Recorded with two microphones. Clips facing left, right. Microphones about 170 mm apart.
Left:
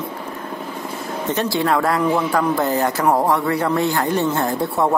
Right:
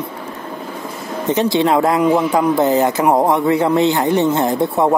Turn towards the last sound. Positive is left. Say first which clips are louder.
# right 4 dB
turn(degrees=-20)  # may be behind; listen again after turning